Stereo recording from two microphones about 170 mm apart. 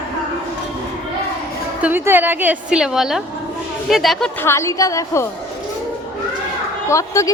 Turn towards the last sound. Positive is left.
turn(degrees=20)  # may be behind; listen again after turning